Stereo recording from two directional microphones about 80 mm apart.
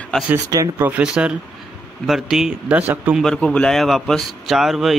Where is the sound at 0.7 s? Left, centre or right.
Right.